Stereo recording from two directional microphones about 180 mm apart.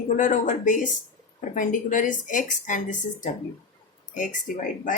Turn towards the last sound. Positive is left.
turn(degrees=45)  # may be behind; listen again after turning